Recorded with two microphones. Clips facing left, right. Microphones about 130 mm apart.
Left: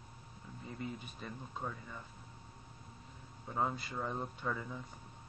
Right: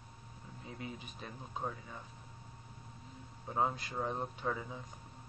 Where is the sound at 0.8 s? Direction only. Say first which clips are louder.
Left 2 dB; 5° right (ahead or behind).